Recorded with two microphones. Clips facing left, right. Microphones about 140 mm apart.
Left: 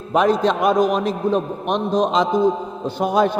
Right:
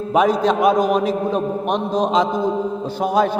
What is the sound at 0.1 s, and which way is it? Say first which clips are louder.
A man's voice: even; 5° right (ahead or behind).